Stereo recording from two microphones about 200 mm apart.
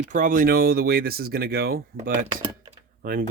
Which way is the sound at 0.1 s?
40° right (ahead or behind).